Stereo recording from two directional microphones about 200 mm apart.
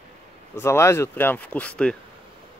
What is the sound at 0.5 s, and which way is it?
Speech, 15° left (ahead or behind).